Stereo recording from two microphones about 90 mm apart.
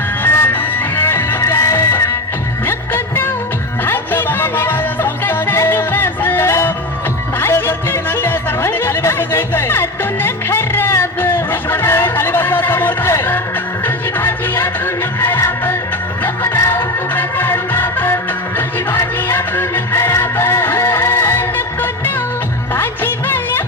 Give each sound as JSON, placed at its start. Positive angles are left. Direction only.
{"t": 0.2, "sound": "music", "side_deg": 25}
{"t": 2.6, "sound": "music", "side_deg": 20}